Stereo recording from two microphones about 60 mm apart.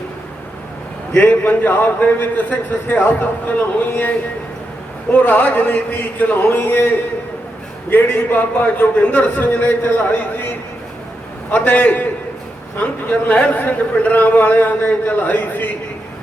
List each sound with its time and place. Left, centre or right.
1.2 s a man's voice: left
5.1 s a man's voice: left
11.5 s a man's voice: left